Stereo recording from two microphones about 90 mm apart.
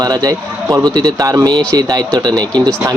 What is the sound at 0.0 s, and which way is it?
Speech, 45° right (ahead or behind).